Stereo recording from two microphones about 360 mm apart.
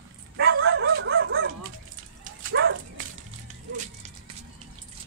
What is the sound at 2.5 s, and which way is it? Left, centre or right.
Dog, right.